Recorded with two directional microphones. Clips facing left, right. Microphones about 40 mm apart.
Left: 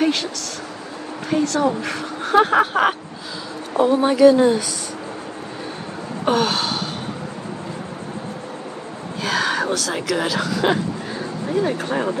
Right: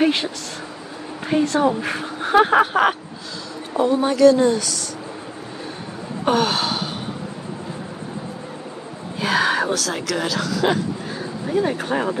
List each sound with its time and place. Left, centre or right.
0.0 s a woman's voice: right; by 3.0 s centre
3.7 s speech: centre
6.2 s speech: centre
9.2 s speech: centre
9.8 s speech: centre
11.5 s speech: centre